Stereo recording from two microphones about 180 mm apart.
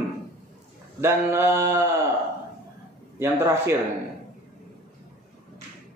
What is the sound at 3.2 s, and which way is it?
Speech, 15° right (ahead or behind).